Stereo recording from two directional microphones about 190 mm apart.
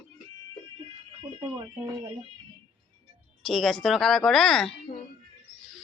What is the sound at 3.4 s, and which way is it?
Speech, centre (ahead or behind).